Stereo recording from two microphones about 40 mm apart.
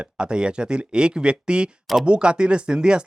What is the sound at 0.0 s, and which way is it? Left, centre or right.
Speech, right.